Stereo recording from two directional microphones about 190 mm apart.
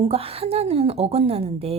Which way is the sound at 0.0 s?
30° right (ahead or behind).